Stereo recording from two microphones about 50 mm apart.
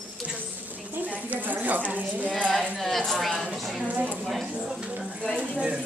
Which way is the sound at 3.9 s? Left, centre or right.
Right.